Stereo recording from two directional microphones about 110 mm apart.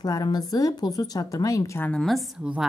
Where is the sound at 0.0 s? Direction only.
35° left (ahead or behind).